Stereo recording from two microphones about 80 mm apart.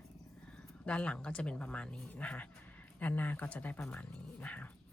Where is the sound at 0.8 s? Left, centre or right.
Centre.